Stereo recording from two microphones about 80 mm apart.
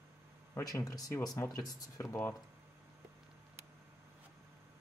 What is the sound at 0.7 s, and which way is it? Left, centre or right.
Speech, left.